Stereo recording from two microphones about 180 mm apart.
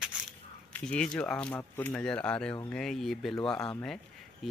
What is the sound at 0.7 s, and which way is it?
Speech, 5° left (ahead or behind).